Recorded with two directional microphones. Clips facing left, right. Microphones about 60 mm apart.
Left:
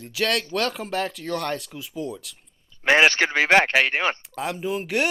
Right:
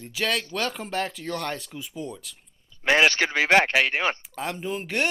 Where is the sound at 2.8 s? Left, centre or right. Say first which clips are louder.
Left 2 dB; left.